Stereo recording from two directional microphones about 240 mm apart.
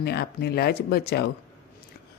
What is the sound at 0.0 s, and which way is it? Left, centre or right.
Speech, left.